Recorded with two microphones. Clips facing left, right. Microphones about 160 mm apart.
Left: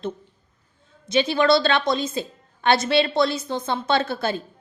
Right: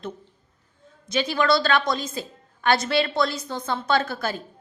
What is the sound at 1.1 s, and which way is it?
A woman's voice, 25° left (ahead or behind).